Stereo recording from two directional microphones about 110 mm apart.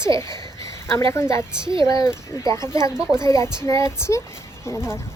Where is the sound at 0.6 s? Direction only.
25° left (ahead or behind).